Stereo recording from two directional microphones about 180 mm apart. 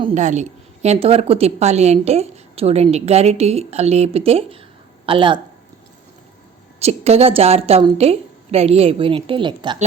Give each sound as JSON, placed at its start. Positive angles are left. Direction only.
{"t": 0.1, "sound": "a woman's voice", "side_deg": -40}
{"t": 6.7, "sound": "a woman's voice", "side_deg": -35}